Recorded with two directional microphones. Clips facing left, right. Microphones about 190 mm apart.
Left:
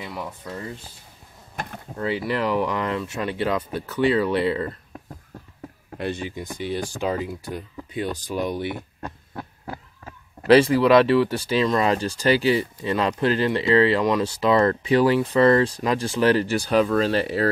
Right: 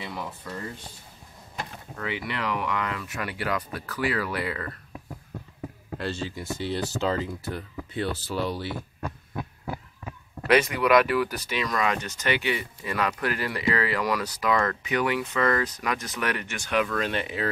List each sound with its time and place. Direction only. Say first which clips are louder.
2.0 s speech: left 7 dB; 30° left (ahead or behind)
5.9 s speech: left 3 dB; 15° left (ahead or behind)
10.0 s speech: left 8 dB; 30° left (ahead or behind)